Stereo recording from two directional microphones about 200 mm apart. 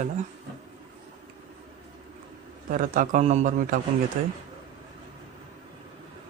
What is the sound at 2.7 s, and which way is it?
A man's voice, 45° right (ahead or behind).